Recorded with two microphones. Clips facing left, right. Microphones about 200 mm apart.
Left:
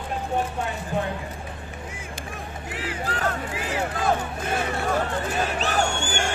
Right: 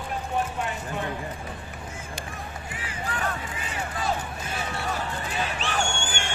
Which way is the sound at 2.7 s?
70° left (ahead or behind).